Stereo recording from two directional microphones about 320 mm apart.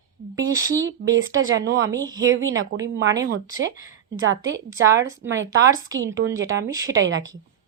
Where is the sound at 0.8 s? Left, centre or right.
Right.